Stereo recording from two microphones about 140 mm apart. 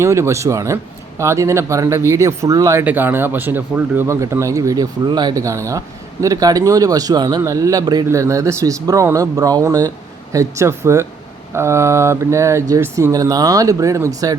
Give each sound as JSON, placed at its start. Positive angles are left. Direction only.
{"t": 0.0, "sound": "speech", "side_deg": -20}